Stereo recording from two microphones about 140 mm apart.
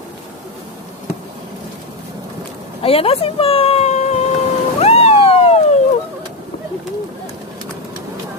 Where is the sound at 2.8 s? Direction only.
45° left (ahead or behind).